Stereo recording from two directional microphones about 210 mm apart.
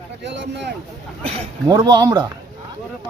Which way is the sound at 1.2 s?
30° right (ahead or behind).